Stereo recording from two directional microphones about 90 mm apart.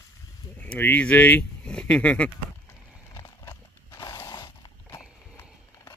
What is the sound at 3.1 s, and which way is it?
Horse, 40° left (ahead or behind).